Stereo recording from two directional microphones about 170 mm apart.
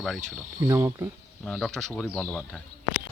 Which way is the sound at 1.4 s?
5° left (ahead or behind).